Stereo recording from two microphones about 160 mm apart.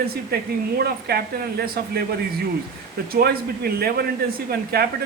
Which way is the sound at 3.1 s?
75° right (ahead or behind).